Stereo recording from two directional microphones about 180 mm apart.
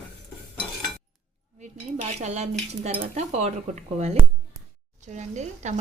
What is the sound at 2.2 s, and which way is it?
Speech, 40° right (ahead or behind).